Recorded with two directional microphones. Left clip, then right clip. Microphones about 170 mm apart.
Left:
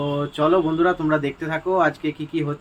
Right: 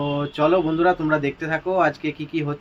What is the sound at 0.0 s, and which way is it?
Speech, 10° right (ahead or behind).